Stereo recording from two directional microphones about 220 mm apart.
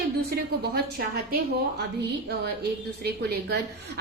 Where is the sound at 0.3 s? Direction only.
45° right (ahead or behind).